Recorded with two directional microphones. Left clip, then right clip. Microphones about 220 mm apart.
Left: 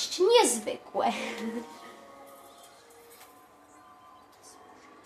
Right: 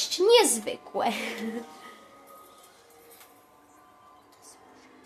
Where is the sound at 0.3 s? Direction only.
20° right (ahead or behind).